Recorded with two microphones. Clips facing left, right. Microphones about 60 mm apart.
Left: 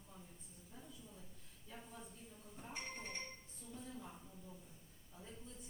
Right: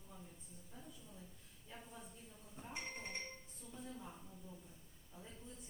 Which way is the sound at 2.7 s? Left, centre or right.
Centre.